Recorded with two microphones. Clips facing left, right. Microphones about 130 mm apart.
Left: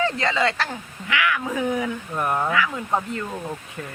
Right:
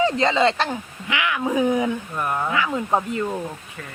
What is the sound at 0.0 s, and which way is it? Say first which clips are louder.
Speech: right 4 dB; 20° right (ahead or behind).